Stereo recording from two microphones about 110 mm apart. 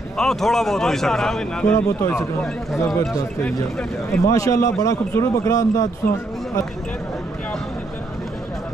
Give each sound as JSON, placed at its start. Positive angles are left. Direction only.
{"t": 0.2, "sound": "speech", "side_deg": 5}
{"t": 1.8, "sound": "a man's voice", "side_deg": 20}
{"t": 4.1, "sound": "a man's voice", "side_deg": 30}